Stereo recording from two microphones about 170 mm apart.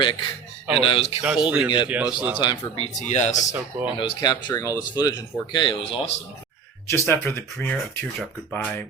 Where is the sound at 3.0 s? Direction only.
40° left (ahead or behind).